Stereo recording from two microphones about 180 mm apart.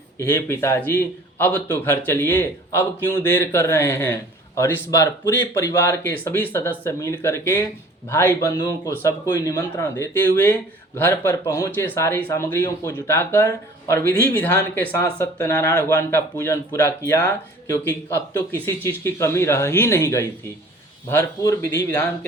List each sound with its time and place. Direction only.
0.2 s a man's voice: 15° left (ahead or behind)